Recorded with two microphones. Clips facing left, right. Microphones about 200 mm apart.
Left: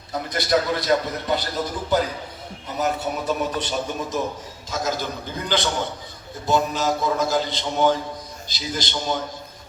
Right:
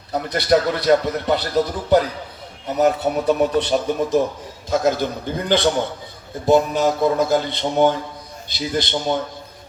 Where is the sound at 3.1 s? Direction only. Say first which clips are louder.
Right 7 dB; 55° right (ahead or behind).